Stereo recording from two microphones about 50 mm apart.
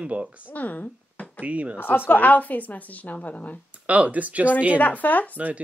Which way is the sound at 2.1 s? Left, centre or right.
Left.